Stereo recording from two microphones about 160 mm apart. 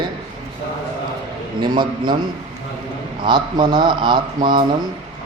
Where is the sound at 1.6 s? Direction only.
30° right (ahead or behind).